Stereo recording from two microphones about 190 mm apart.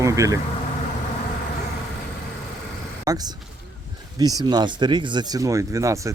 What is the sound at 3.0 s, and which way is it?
Speech, 20° right (ahead or behind).